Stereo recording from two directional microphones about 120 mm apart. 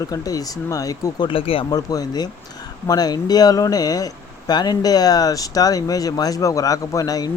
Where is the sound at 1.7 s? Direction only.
30° left (ahead or behind).